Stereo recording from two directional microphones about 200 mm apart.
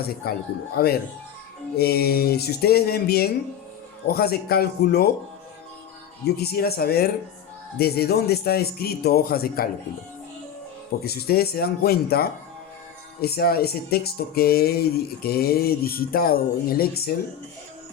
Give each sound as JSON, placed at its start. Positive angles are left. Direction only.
{"t": 0.2, "sound": "speech", "side_deg": 50}
{"t": 6.2, "sound": "speech", "side_deg": 50}
{"t": 11.0, "sound": "speech", "side_deg": 50}